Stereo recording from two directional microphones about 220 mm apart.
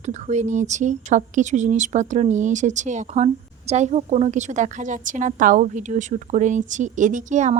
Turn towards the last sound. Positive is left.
turn(degrees=-35)  # may be behind; listen again after turning